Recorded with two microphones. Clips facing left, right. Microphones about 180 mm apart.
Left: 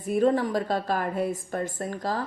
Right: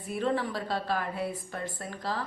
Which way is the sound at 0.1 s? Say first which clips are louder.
Left 7 dB; 45° left (ahead or behind).